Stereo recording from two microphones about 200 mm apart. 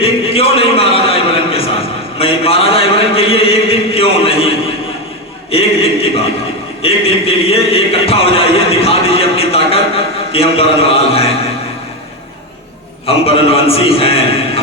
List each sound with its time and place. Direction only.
0.0 s a sound: 30° left (ahead or behind)
5.5 s a man's voice: 30° left (ahead or behind)
13.1 s a man's voice: 30° left (ahead or behind)